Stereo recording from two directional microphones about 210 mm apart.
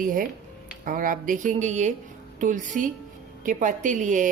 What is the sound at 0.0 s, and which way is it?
A woman's voice, 40° right (ahead or behind).